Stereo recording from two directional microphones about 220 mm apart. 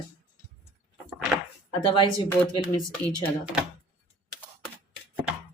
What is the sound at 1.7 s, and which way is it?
Speech, 20° left (ahead or behind).